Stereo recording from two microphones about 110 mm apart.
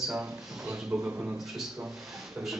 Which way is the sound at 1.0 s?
15° right (ahead or behind).